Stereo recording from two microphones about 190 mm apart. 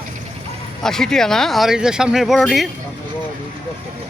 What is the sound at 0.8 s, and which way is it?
Speech, 5° left (ahead or behind).